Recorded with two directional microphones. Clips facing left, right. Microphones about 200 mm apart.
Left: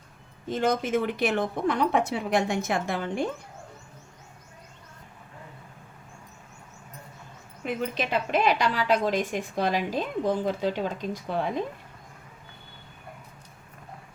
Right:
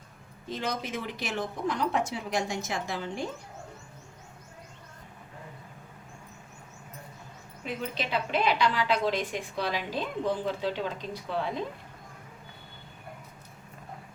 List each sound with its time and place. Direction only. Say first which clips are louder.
0.5 s a woman's voice: left 8 dB; 50° left (ahead or behind)
7.6 s a woman's voice: left 5 dB; 50° left (ahead or behind)